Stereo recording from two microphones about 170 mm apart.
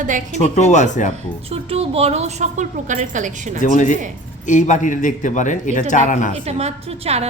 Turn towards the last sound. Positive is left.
turn(degrees=-40)  # may be behind; listen again after turning